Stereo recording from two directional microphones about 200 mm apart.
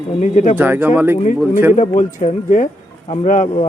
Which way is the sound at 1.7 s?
35° left (ahead or behind).